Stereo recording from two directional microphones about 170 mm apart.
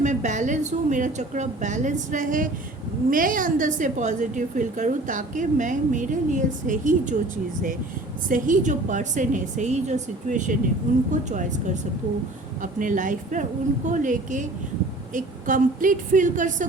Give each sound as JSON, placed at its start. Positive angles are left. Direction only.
{"t": 0.0, "sound": "a woman's voice", "side_deg": -45}
{"t": 8.3, "sound": "a woman's voice", "side_deg": -50}